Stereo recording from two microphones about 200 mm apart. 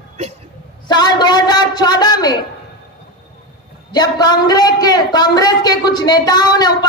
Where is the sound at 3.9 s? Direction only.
20° left (ahead or behind).